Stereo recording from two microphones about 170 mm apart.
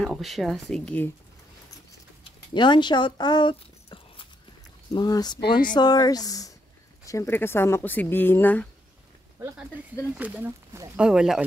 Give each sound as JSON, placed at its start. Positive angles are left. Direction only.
{"t": 0.0, "sound": "speech", "side_deg": 0}
{"t": 2.5, "sound": "speech", "side_deg": 25}
{"t": 10.1, "sound": "speech", "side_deg": -10}